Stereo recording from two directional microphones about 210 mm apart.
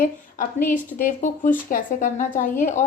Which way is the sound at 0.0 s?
40° left (ahead or behind).